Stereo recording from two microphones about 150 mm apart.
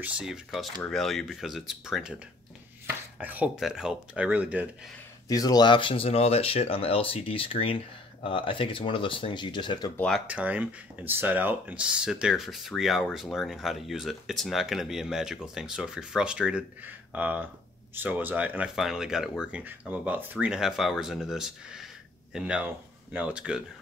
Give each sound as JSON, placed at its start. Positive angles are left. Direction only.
{"t": 0.0, "sound": "speech", "side_deg": -5}
{"t": 3.2, "sound": "speech", "side_deg": -10}
{"t": 5.3, "sound": "speech", "side_deg": 25}
{"t": 9.9, "sound": "speech", "side_deg": 5}
{"t": 10.2, "sound": "speech", "side_deg": -10}